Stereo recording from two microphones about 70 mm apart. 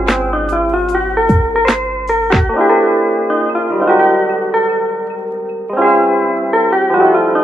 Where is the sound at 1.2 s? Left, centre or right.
Centre.